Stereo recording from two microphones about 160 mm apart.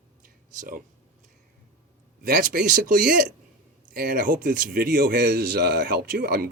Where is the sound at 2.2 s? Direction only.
60° right (ahead or behind).